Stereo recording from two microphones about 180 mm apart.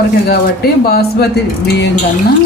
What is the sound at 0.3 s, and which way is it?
Speech, 60° left (ahead or behind).